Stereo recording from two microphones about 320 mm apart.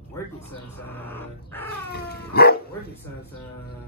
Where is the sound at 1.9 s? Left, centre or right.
Left.